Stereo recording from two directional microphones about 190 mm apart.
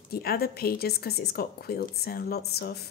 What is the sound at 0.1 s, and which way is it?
A woman's voice, 55° left (ahead or behind).